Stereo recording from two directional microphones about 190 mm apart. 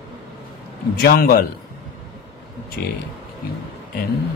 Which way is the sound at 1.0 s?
55° left (ahead or behind).